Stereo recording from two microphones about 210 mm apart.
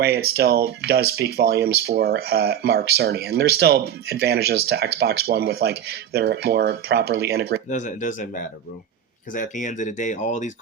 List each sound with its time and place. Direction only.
0.0 s speech: 50° right (ahead or behind)
7.7 s speech: 35° left (ahead or behind)
9.3 s speech: 40° left (ahead or behind)